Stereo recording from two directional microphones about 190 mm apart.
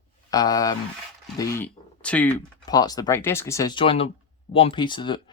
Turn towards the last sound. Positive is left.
turn(degrees=25)  # may be behind; listen again after turning